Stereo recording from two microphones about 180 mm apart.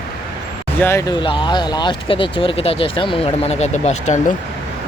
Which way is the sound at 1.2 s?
25° left (ahead or behind).